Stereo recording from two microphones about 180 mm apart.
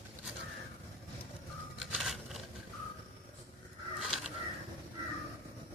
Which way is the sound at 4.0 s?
Centre (ahead or behind).